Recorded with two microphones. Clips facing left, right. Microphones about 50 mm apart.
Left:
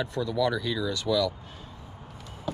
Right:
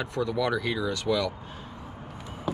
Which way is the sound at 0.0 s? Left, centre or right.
Right.